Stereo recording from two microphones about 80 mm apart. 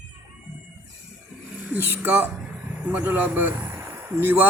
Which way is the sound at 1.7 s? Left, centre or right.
Right.